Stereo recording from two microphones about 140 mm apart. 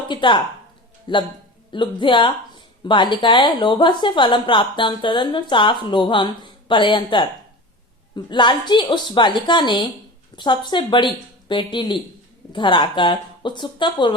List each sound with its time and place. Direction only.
0.1 s a woman's voice: 35° left (ahead or behind)